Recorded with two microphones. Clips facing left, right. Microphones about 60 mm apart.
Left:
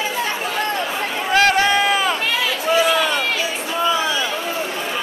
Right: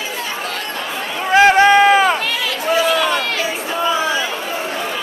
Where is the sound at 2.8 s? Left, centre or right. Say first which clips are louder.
Right 1 dB; centre.